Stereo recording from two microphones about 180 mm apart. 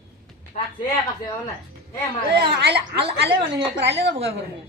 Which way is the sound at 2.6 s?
65° right (ahead or behind).